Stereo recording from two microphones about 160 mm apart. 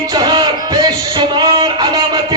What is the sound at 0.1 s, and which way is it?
Music, 25° right (ahead or behind).